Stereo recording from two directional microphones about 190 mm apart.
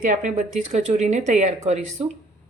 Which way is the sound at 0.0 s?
40° right (ahead or behind).